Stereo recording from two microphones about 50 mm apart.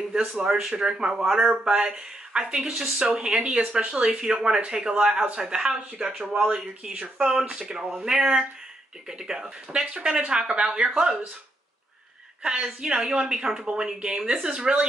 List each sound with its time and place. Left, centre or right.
0.3 s a woman's voice: centre
3.1 s a woman's voice: centre
12.6 s a woman's voice: centre